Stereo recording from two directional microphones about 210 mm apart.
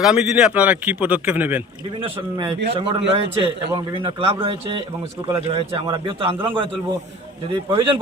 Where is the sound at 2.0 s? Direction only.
25° right (ahead or behind).